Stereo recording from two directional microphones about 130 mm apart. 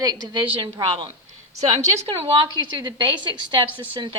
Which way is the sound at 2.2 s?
35° right (ahead or behind).